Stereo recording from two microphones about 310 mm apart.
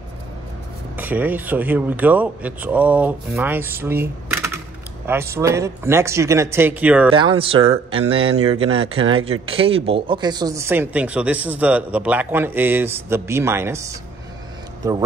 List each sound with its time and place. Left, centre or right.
0.9 s speech: centre
7.1 s speech: centre